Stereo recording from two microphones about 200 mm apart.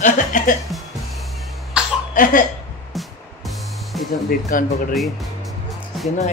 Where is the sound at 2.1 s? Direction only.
45° left (ahead or behind).